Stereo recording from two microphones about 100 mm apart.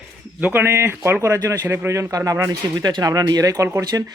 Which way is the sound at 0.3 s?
20° right (ahead or behind).